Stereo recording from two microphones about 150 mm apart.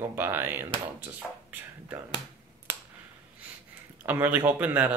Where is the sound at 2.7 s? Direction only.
15° right (ahead or behind).